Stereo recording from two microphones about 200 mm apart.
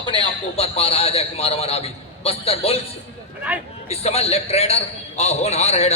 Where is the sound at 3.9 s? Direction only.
30° left (ahead or behind).